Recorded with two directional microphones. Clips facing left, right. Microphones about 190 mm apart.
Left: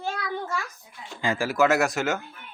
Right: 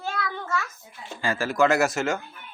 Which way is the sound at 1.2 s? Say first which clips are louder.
Even; 15° left (ahead or behind).